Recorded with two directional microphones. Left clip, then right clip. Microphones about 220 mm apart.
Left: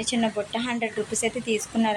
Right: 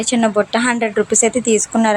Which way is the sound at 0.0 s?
15° right (ahead or behind).